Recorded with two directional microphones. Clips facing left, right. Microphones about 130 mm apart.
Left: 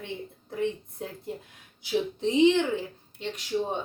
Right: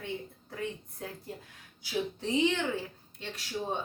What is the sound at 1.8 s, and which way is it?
Speech, 20° left (ahead or behind).